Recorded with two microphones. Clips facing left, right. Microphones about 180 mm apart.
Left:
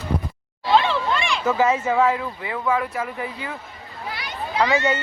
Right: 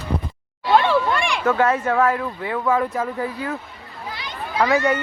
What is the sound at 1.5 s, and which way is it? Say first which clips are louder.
Speech: right 1 dB; 5° left (ahead or behind).